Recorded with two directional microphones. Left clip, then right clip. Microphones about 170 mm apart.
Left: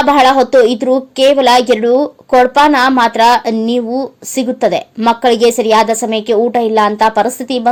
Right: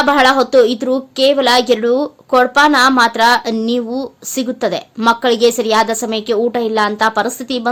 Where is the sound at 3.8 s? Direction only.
20° right (ahead or behind).